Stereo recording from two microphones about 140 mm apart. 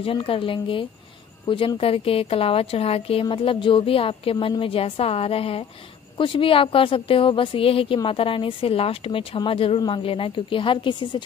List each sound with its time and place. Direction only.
0.0 s a woman's voice: 40° left (ahead or behind)